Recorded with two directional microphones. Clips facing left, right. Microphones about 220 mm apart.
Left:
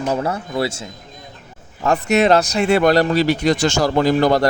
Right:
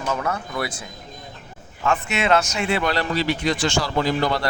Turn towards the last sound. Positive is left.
turn(degrees=45)  # may be behind; listen again after turning